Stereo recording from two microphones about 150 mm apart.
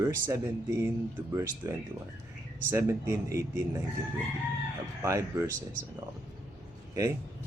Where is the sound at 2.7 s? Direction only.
15° right (ahead or behind).